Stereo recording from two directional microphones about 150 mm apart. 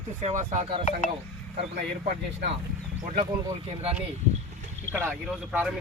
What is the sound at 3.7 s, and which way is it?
Speech, 40° right (ahead or behind).